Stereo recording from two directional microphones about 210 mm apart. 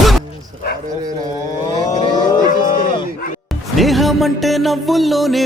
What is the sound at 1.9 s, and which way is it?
Cattle, 20° left (ahead or behind).